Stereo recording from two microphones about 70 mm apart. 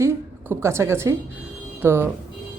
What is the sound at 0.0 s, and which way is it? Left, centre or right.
A woman's voice, right.